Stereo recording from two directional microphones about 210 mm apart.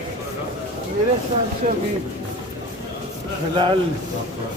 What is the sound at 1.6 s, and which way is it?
Speech, 40° right (ahead or behind).